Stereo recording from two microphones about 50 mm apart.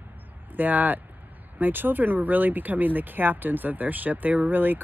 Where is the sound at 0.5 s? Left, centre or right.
Right.